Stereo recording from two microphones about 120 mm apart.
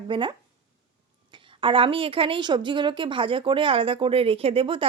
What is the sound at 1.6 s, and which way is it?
Speech, 45° right (ahead or behind).